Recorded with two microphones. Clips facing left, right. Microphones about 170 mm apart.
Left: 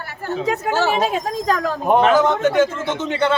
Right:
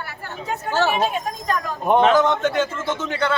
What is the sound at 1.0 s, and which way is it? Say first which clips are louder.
Speech: left 3 dB; 90° left.